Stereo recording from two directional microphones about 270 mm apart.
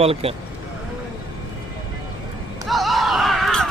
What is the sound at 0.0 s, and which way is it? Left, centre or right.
Speech, right.